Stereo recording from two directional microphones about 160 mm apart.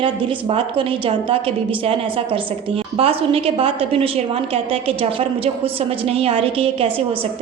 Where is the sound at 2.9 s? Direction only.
35° right (ahead or behind).